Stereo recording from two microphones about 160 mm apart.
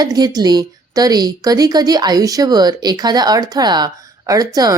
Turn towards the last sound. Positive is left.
turn(degrees=-25)  # may be behind; listen again after turning